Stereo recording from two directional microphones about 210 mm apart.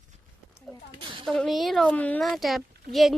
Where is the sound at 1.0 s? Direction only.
25° right (ahead or behind).